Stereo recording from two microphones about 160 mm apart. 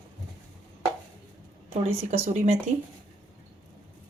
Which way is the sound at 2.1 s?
40° right (ahead or behind).